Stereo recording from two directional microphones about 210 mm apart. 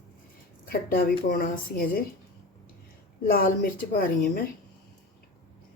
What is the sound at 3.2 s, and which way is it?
A woman's voice, 45° left (ahead or behind).